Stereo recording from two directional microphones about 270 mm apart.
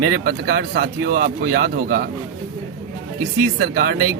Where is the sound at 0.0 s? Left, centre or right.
Right.